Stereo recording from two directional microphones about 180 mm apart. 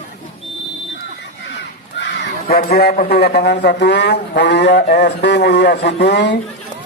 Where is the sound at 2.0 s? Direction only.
55° left (ahead or behind).